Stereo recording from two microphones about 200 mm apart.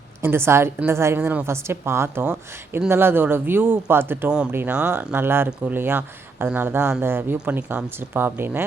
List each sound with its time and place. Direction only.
0.2 s a woman's voice: 10° right (ahead or behind)